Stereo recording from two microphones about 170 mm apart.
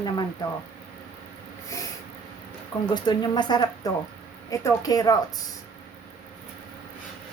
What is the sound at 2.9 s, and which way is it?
Speech, 25° left (ahead or behind).